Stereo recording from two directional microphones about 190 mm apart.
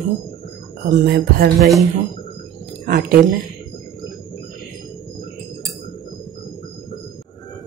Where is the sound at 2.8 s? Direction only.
55° right (ahead or behind).